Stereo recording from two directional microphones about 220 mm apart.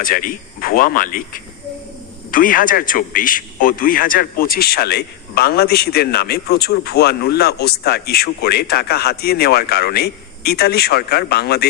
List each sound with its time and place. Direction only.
0.0 s a man's voice: 40° left (ahead or behind)